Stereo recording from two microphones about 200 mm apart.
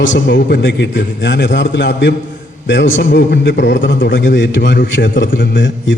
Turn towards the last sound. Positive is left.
turn(degrees=65)  # may be behind; listen again after turning